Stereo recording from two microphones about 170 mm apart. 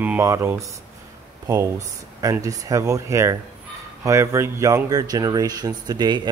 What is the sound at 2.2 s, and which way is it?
Speech, 20° right (ahead or behind).